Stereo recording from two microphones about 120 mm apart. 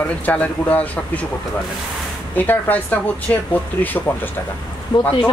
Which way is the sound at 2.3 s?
15° left (ahead or behind).